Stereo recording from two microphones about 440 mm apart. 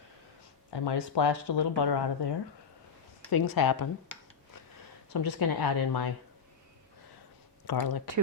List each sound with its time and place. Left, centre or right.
0.7 s speech: left
3.2 s a woman's voice: left
5.1 s a woman's voice: left
7.7 s a woman's voice: left